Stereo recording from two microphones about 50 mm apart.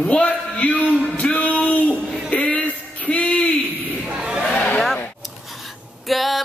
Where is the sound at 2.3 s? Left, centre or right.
Left.